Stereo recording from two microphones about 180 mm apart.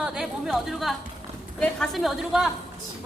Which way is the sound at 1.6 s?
5° left (ahead or behind).